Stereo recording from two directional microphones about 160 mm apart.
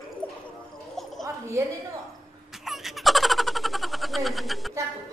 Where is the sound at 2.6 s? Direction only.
Centre (ahead or behind).